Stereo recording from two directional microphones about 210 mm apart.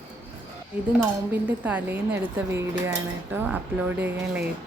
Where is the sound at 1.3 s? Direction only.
5° right (ahead or behind).